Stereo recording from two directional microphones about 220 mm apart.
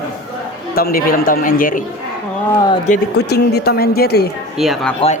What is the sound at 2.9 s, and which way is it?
Speech, 45° left (ahead or behind).